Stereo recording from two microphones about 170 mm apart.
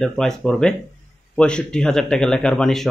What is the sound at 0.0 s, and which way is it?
Speech, centre (ahead or behind).